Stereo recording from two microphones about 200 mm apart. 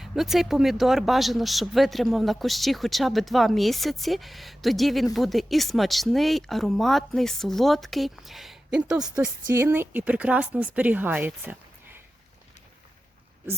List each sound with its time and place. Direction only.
0.0 s speech: centre (ahead or behind)